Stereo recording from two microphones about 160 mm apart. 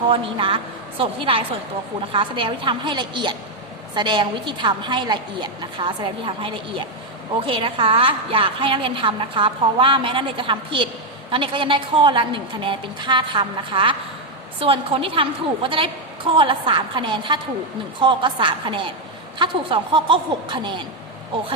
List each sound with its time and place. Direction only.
0.1 s a woman's voice: 35° right (ahead or behind)